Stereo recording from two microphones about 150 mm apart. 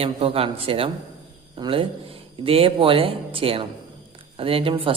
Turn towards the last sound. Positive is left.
turn(degrees=-35)  # may be behind; listen again after turning